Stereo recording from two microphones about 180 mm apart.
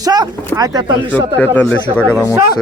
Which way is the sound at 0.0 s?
20° right (ahead or behind).